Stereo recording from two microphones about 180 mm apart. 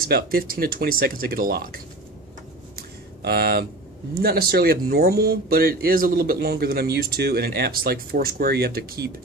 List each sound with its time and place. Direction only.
0.0 s speech: 55° right (ahead or behind)
3.3 s speech: 60° right (ahead or behind)